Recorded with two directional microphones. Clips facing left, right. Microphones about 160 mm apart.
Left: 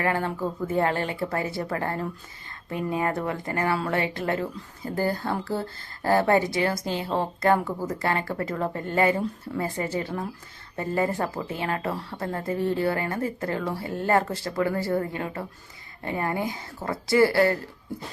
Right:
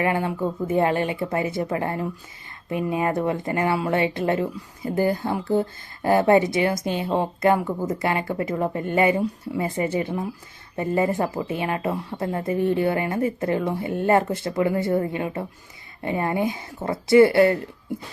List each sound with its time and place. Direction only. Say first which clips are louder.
0.0 s speech: right 3 dB; 15° right (ahead or behind)